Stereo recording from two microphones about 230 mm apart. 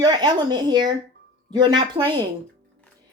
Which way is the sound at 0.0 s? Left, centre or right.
Centre.